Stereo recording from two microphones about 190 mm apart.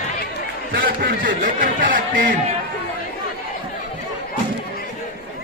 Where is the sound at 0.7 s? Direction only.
50° right (ahead or behind).